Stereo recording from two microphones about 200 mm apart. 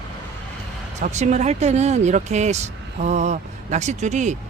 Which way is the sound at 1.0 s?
35° right (ahead or behind).